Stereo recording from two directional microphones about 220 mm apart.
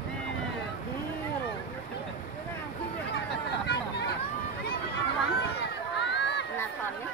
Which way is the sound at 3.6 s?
50° left (ahead or behind).